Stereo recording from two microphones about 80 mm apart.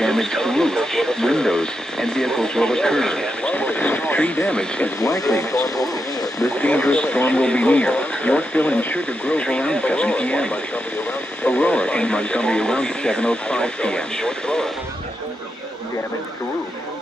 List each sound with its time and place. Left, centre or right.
0.0 s speech: centre
5.0 s speech: left
6.6 s speech: centre